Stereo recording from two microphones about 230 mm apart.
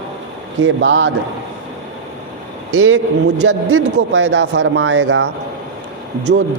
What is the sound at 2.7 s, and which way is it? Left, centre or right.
Speech, right.